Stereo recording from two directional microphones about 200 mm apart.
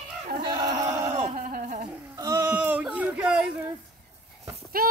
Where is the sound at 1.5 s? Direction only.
40° right (ahead or behind).